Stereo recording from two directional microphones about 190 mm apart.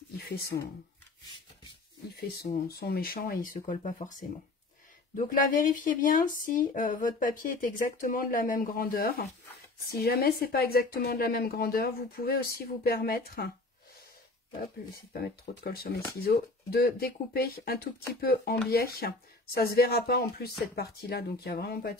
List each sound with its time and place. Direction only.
0.3 s speech: 55° left (ahead or behind)
2.4 s speech: 45° left (ahead or behind)
15.2 s speech: 55° left (ahead or behind)